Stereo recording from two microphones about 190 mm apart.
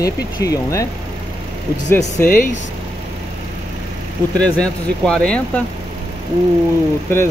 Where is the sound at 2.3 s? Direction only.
45° left (ahead or behind).